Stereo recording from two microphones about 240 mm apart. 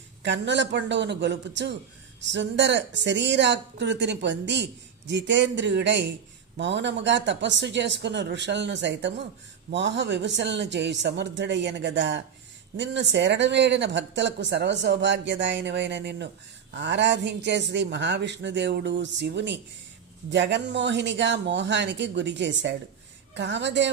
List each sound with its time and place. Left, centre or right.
0.2 s a woman's voice: right